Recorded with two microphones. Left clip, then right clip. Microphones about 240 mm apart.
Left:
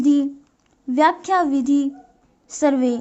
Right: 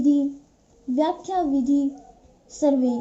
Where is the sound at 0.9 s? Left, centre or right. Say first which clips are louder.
Left 7 dB; left.